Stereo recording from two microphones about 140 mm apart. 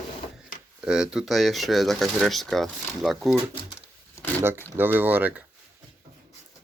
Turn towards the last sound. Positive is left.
turn(degrees=-10)  # may be behind; listen again after turning